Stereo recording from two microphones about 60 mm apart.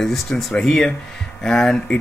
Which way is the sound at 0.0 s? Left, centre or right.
Centre.